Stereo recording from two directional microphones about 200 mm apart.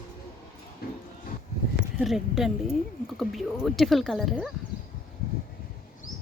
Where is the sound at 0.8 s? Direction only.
50° left (ahead or behind).